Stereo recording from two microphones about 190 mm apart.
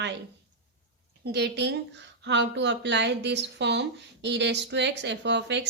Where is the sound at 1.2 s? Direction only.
60° right (ahead or behind).